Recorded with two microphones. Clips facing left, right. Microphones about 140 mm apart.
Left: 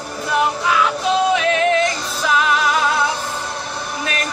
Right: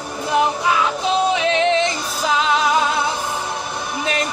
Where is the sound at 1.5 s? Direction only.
25° right (ahead or behind).